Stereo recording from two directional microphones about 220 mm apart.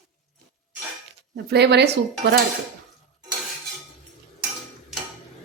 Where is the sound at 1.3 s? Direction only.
50° right (ahead or behind).